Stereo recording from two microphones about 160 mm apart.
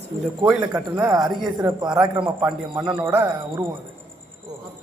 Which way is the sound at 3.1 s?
10° right (ahead or behind).